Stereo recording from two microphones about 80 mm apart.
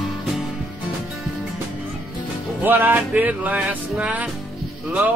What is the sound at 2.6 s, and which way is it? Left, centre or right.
Music, right.